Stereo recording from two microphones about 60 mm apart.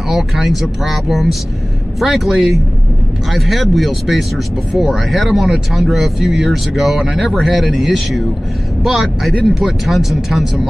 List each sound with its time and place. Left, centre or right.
0.1 s speech: centre